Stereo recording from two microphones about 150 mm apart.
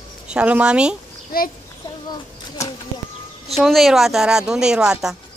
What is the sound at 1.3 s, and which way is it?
Speech, 80° left.